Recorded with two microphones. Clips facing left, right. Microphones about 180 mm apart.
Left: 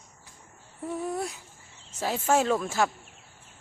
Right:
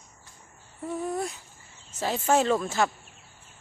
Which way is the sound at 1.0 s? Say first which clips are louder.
Right 1 dB; 5° left (ahead or behind).